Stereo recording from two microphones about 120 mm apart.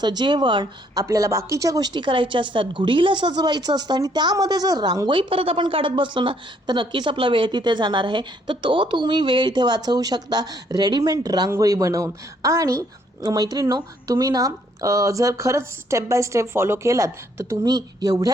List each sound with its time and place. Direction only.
0.0 s a woman's voice: 40° right (ahead or behind)
1.0 s a woman's voice: 25° right (ahead or behind)